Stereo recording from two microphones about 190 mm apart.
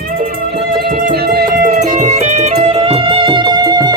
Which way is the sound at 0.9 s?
55° right (ahead or behind).